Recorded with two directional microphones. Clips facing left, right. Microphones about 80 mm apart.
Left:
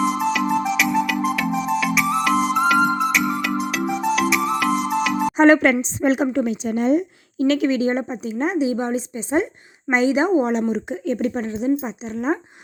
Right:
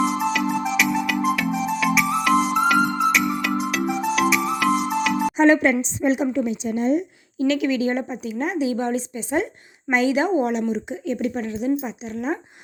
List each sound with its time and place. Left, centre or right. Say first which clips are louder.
0.0 s music: left 1 dB; centre
6.0 s a woman's voice: left 2 dB; left
7.3 s speech: left 2 dB; left
10.5 s speech: left 2 dB; left